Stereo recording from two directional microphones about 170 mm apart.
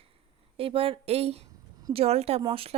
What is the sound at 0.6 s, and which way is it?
A woman's voice, 30° right (ahead or behind).